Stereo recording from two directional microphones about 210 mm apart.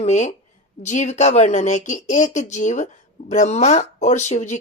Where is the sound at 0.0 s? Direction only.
35° left (ahead or behind).